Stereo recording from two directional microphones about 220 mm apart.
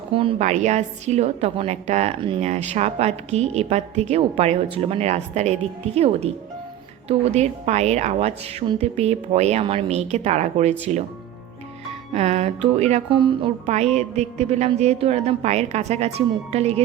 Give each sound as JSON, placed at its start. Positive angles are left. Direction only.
{"t": 0.1, "sound": "a woman's voice", "side_deg": -25}
{"t": 12.1, "sound": "a woman's voice", "side_deg": -30}